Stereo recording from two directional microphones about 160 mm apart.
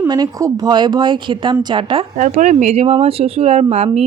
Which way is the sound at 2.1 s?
50° right (ahead or behind).